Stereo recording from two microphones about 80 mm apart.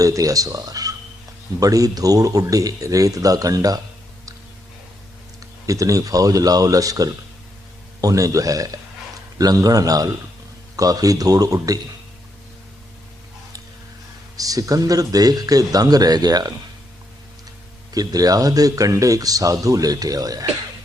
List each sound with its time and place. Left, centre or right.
0.0 s speech: right
5.6 s speech: right
14.3 s speech: right
17.9 s speech: right